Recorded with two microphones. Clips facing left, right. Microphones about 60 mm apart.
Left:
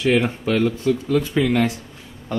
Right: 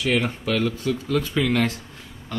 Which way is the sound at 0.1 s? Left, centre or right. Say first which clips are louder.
Left 3 dB; left.